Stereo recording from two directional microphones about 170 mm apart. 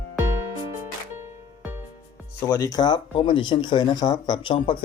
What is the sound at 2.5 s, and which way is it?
Speech, 20° left (ahead or behind).